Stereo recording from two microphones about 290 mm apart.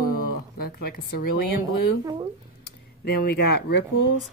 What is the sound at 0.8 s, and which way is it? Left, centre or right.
Speech, left.